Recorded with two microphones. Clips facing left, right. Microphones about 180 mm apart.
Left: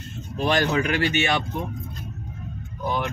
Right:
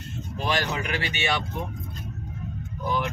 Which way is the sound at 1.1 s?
50° left (ahead or behind).